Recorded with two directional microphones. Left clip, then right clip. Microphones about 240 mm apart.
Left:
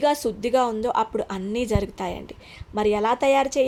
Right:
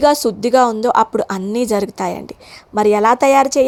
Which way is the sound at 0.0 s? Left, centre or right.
Right.